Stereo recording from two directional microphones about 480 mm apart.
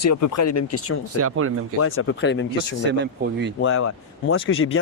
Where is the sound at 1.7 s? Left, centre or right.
Left.